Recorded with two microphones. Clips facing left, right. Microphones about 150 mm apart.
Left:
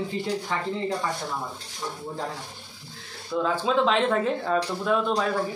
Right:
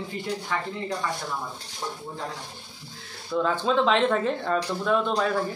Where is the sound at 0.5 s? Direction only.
30° left (ahead or behind).